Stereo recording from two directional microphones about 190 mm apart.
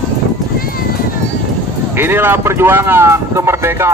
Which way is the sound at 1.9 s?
10° right (ahead or behind).